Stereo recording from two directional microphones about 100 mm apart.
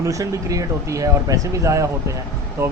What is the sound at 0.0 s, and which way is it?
Speech, 35° right (ahead or behind).